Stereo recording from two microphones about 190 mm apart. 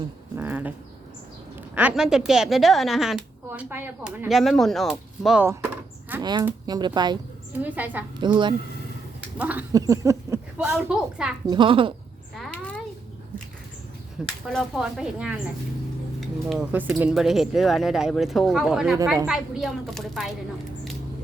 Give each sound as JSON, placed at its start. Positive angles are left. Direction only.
{"t": 0.3, "sound": "a sound", "side_deg": -10}
{"t": 1.7, "sound": "a woman's voice", "side_deg": -5}
{"t": 6.4, "sound": "speech", "side_deg": -20}
{"t": 7.6, "sound": "a woman's voice", "side_deg": -10}
{"t": 8.2, "sound": "speech", "side_deg": -25}
{"t": 9.4, "sound": "a woman's voice", "side_deg": -10}
{"t": 9.7, "sound": "a woman's voice", "side_deg": -20}
{"t": 11.4, "sound": "speech", "side_deg": -25}
{"t": 12.4, "sound": "a sound", "side_deg": 5}
{"t": 14.4, "sound": "a woman's voice", "side_deg": 0}
{"t": 16.5, "sound": "a woman's voice", "side_deg": -5}